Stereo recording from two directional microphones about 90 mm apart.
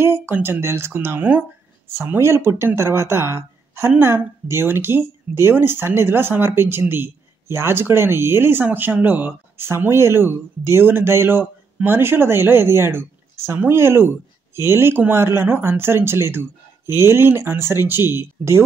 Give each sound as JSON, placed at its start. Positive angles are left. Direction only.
{"t": 0.0, "sound": "speech", "side_deg": -25}